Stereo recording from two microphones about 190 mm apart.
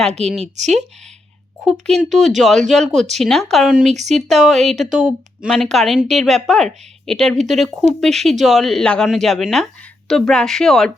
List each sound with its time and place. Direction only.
0.5 s speech: 35° right (ahead or behind)
1.6 s a woman's voice: centre (ahead or behind)
3.8 s speech: 35° right (ahead or behind)
4.1 s a woman's voice: centre (ahead or behind)